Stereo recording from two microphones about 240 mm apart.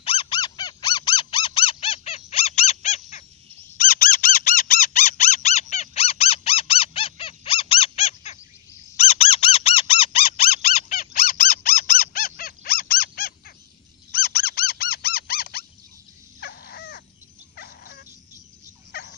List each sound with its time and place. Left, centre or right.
0.0 s squeak: left
3.7 s a sound: left
10.6 s a sound: left
14.1 s squeak: left
16.3 s crow: left
17.6 s dog: left
18.9 s turkey: left